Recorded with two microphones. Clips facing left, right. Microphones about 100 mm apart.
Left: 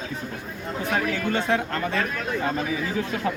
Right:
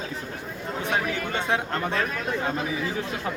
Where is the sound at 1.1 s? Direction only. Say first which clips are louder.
Left 3 dB; 20° right (ahead or behind).